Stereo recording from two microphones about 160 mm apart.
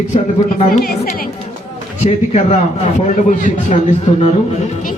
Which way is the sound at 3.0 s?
50° left (ahead or behind).